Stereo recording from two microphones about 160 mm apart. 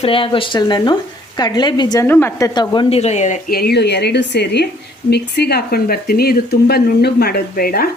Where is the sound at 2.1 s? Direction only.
15° left (ahead or behind).